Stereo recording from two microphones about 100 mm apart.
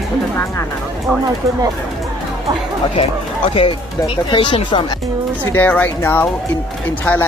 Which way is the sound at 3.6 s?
60° left (ahead or behind).